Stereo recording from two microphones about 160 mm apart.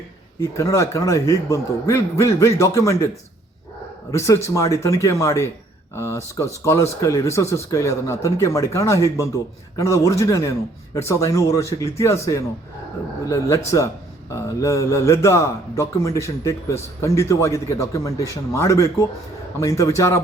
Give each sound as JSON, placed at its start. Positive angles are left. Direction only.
{"t": 0.3, "sound": "a man's voice", "side_deg": 20}
{"t": 4.1, "sound": "a man's voice", "side_deg": 20}